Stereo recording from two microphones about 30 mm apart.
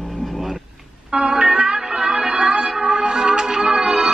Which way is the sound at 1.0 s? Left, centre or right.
Right.